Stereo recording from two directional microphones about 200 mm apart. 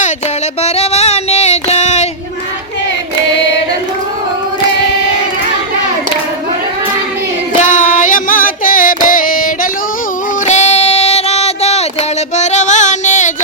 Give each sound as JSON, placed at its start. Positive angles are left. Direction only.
{"t": 0.6, "sound": "child singing", "side_deg": 30}
{"t": 7.6, "sound": "music", "side_deg": 40}
{"t": 10.4, "sound": "a sound", "side_deg": 35}
{"t": 12.4, "sound": "music", "side_deg": 35}